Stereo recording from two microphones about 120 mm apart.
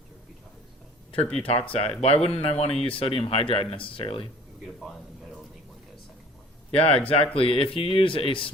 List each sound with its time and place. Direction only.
1.1 s speech: 55° left (ahead or behind)
6.7 s speech: 55° left (ahead or behind)